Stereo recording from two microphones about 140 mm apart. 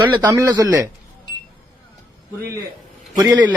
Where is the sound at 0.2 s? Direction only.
25° right (ahead or behind).